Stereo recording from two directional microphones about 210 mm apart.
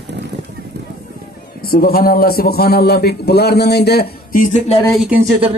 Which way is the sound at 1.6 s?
45° left (ahead or behind).